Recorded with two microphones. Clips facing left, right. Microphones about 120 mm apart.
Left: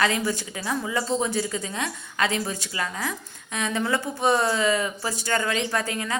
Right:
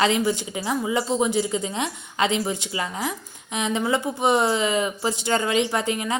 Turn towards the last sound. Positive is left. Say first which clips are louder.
# right 3 dB
turn(degrees=-20)  # may be behind; listen again after turning